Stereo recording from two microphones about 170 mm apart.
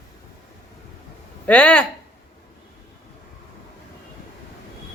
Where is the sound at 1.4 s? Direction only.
5° left (ahead or behind).